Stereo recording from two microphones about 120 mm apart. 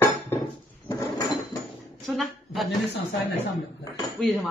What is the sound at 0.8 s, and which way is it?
Drawer open or close, 35° left (ahead or behind).